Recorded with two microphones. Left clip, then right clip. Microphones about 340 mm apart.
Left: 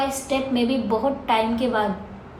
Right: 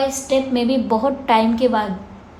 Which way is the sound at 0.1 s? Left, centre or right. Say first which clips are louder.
Right 5 dB; right.